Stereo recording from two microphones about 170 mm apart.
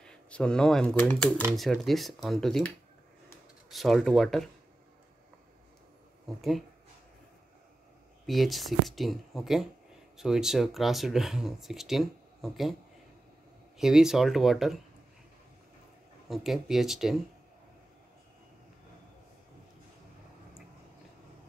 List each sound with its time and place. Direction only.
0.0 s speech: 5° left (ahead or behind)
3.7 s speech: centre (ahead or behind)
6.2 s speech: centre (ahead or behind)
8.3 s speech: centre (ahead or behind)
13.7 s speech: centre (ahead or behind)
16.3 s speech: centre (ahead or behind)